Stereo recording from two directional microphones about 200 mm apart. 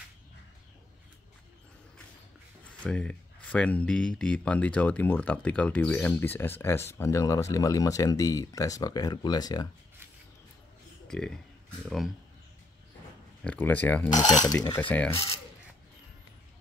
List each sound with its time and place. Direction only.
2.8 s speech: 5° left (ahead or behind)
11.1 s speech: 5° left (ahead or behind)
13.4 s speech: 10° left (ahead or behind)
14.1 s speech: 20° left (ahead or behind)
14.8 s speech: 5° left (ahead or behind)